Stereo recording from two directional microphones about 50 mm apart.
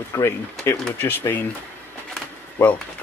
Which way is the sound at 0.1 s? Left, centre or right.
Left.